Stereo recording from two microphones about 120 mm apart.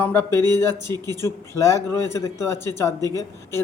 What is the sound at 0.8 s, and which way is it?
Speech, 30° right (ahead or behind).